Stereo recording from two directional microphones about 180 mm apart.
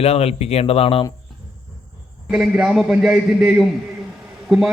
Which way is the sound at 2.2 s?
5° right (ahead or behind).